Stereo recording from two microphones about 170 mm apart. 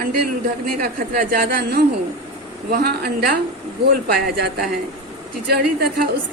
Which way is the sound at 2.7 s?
70° right (ahead or behind).